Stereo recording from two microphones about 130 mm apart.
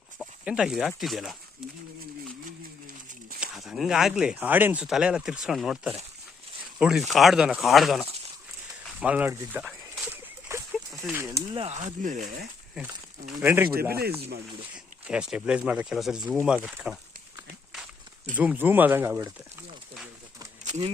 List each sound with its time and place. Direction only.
0.4 s speech: 5° right (ahead or behind)
3.4 s speech: 5° right (ahead or behind)
9.3 s speech: 20° right (ahead or behind)
10.0 s a sound: 20° right (ahead or behind)
11.0 s speech: 20° right (ahead or behind)
11.7 s speech: 70° right (ahead or behind)
12.7 s speech: 5° right (ahead or behind)
13.4 s speech: 15° right (ahead or behind)
18.3 s speech: 10° right (ahead or behind)
20.7 s a sound: 60° right (ahead or behind)